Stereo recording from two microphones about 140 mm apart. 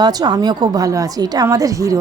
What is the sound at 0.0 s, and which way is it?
A woman's voice, 30° right (ahead or behind).